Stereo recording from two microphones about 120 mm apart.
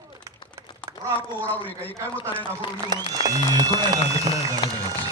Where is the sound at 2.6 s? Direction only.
45° left (ahead or behind).